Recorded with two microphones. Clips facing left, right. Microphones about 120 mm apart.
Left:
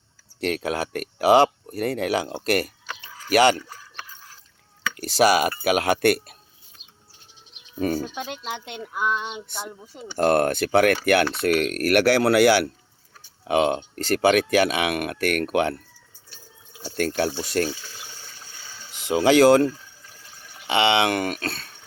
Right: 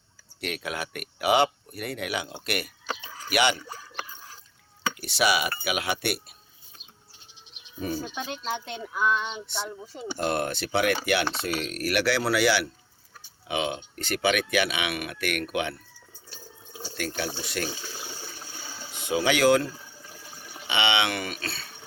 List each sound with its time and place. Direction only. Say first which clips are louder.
0.3 s speech: left 7 dB; 35° left (ahead or behind)
2.8 s a sound: right 3 dB; 20° right (ahead or behind)
3.2 s speech: left 7 dB; 40° left (ahead or behind)
4.9 s speech: left 7 dB; 40° left (ahead or behind)
7.8 s speech: left 7 dB; 60° left (ahead or behind)
8.6 s speech: left 1 dB; 20° left (ahead or behind)
10.2 s speech: left 9 dB; 50° left (ahead or behind)
16.8 s speech: left 8 dB; 45° left (ahead or behind)
18.0 s water: right 4 dB; 10° right (ahead or behind)
19.1 s speech: left 6 dB; 35° left (ahead or behind)
20.0 s water: right 3 dB; 15° right (ahead or behind)
20.7 s speech: left 6 dB; 35° left (ahead or behind)